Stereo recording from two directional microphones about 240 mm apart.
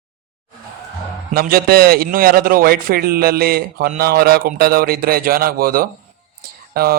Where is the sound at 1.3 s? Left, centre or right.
Right.